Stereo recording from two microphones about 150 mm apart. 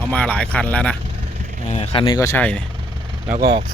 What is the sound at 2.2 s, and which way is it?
Speech, 15° left (ahead or behind).